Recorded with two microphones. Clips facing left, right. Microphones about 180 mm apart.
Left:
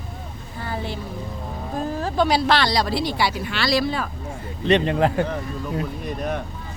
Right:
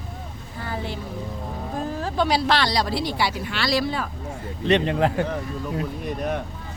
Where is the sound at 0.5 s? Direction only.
30° left (ahead or behind).